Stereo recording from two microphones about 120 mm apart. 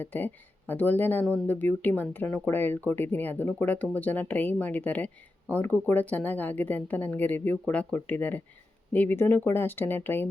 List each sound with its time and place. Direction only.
0.0 s speech: 15° left (ahead or behind)